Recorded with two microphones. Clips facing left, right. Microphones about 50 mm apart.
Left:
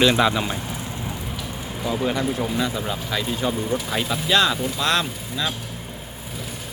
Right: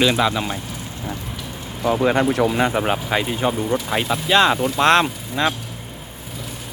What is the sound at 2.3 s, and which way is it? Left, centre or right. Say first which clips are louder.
Speech: right 7 dB; right.